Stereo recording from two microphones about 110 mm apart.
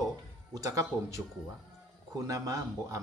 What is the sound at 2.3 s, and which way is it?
Speech, 30° right (ahead or behind).